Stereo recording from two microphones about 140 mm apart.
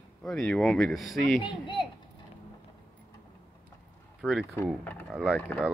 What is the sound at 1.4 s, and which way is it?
Speech, 35° left (ahead or behind).